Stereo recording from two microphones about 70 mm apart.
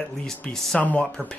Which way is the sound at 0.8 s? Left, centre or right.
Centre.